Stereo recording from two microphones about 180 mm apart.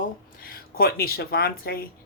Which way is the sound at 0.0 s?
55° left (ahead or behind).